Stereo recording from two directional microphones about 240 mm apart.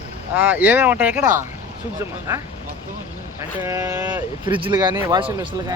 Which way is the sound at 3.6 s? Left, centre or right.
Centre.